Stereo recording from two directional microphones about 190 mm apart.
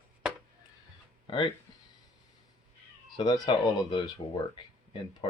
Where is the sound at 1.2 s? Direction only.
25° left (ahead or behind).